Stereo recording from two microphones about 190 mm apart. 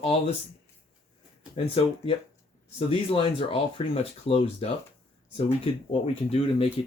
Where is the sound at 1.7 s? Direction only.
30° left (ahead or behind).